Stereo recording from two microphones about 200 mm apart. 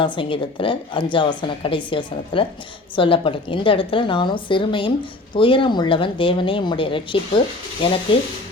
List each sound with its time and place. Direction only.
0.0 s a woman's voice: 25° left (ahead or behind)